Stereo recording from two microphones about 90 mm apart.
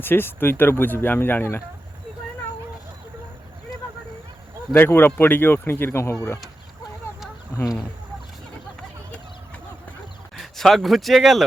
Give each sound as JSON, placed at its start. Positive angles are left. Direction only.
{"t": 0.0, "sound": "speech", "side_deg": 25}
{"t": 4.7, "sound": "speech", "side_deg": 25}
{"t": 7.5, "sound": "speech", "side_deg": 35}
{"t": 10.3, "sound": "speech", "side_deg": 0}